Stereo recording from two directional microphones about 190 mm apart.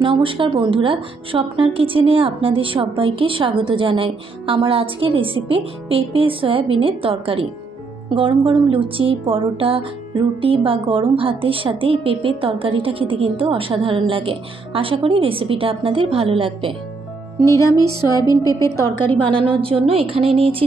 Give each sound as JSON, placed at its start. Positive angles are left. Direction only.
{"t": 0.0, "sound": "music", "side_deg": -25}
{"t": 17.5, "sound": "music", "side_deg": 15}
{"t": 19.2, "sound": "music", "side_deg": -25}